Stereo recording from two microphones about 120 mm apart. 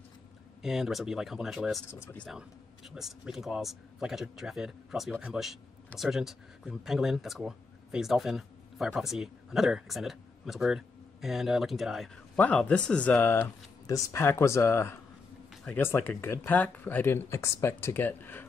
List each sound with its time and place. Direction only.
0.6 s a man's voice: 5° right (ahead or behind)
1.9 s speech: 20° left (ahead or behind)
2.2 s a man's voice: 5° right (ahead or behind)
12.4 s speech: 10° left (ahead or behind)
13.8 s speech: 30° left (ahead or behind)